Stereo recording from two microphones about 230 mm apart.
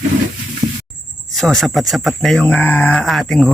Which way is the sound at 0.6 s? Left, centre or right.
Centre.